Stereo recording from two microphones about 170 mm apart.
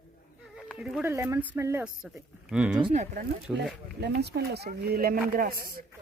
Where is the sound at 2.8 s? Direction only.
35° right (ahead or behind).